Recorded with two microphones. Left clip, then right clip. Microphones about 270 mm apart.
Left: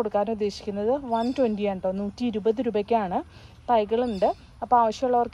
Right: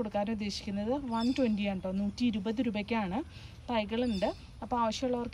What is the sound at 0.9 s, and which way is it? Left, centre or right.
Speech, left.